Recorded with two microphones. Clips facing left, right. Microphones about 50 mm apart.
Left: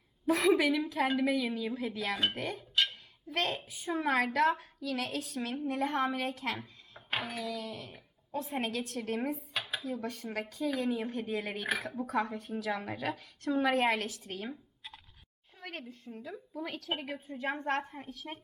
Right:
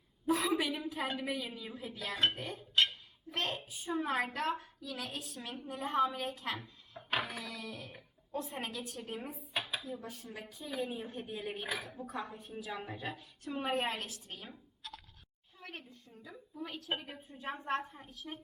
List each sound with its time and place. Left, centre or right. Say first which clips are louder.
0.3 s a woman's voice: left 6 dB; left
5.6 s speech: even; left
7.5 s a sound: left 5 dB; left
8.7 s a woman's voice: left 7 dB; left
9.8 s speech: left 7 dB; left
15.6 s a sound: left 5 dB; left
16.1 s speech: left 5 dB; left
17.2 s speech: left 5 dB; left